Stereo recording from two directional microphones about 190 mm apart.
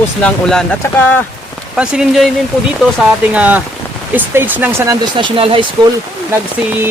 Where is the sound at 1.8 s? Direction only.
5° right (ahead or behind).